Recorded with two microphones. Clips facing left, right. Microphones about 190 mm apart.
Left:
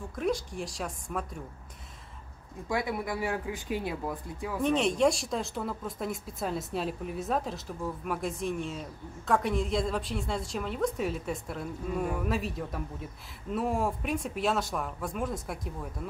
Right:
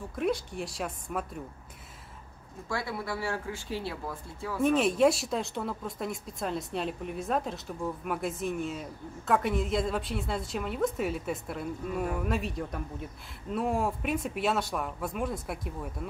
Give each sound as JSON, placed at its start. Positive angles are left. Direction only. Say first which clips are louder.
{"t": 0.1, "sound": "speech", "louder": "right 1 dB", "side_deg": 0}
{"t": 2.7, "sound": "speech", "louder": "left 3 dB", "side_deg": 15}
{"t": 4.6, "sound": "speech", "louder": "right 2 dB", "side_deg": -5}